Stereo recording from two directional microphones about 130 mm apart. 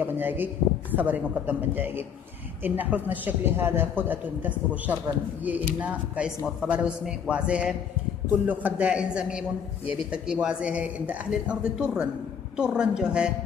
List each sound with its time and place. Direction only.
0.0 s a man's voice: 15° right (ahead or behind)